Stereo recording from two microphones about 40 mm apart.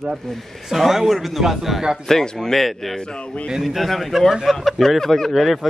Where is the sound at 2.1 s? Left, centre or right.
Centre.